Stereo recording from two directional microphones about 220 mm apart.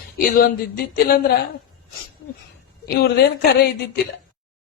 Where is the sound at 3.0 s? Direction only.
45° left (ahead or behind).